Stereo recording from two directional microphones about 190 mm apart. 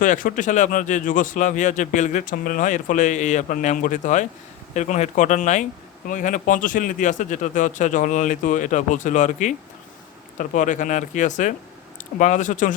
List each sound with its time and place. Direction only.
0.0 s speech: 45° left (ahead or behind)